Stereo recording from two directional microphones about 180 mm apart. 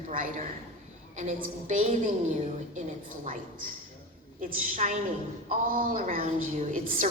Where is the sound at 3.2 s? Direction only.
50° right (ahead or behind).